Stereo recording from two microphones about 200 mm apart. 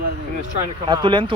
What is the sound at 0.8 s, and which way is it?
Speech, 25° right (ahead or behind).